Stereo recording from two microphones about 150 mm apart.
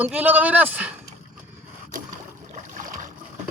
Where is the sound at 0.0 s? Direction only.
10° right (ahead or behind).